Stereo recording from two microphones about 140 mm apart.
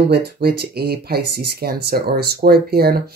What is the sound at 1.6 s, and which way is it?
Speech, 90° right.